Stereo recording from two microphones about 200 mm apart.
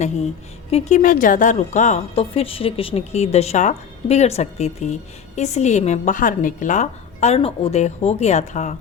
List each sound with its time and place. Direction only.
0.7 s a woman's voice: 35° left (ahead or behind)